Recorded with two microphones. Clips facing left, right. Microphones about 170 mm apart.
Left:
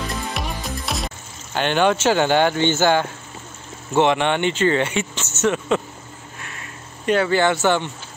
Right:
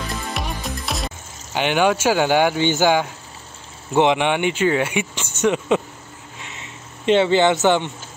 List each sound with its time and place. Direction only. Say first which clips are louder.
0.1 s music: even; centre (ahead or behind)
1.5 s speech: even; 10° right (ahead or behind)
6.5 s a sound: even; 20° right (ahead or behind)